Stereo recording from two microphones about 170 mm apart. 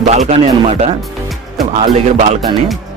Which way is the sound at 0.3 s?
40° right (ahead or behind).